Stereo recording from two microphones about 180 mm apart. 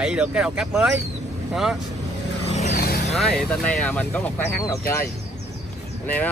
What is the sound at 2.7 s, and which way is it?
Vehicle, 60° left (ahead or behind).